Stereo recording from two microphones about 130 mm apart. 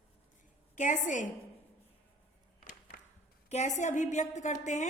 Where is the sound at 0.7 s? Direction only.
75° left (ahead or behind).